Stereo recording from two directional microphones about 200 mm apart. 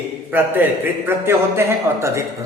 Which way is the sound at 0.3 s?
10° right (ahead or behind).